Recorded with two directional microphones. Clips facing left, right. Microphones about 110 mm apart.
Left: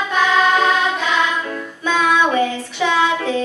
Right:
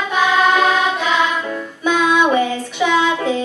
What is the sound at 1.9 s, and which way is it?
Child singing, 15° right (ahead or behind).